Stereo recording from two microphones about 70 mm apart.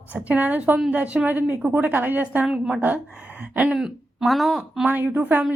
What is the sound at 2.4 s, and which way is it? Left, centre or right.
Speech, centre.